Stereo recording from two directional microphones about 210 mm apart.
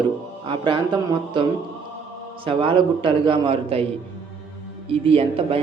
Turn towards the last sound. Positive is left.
turn(degrees=-25)  # may be behind; listen again after turning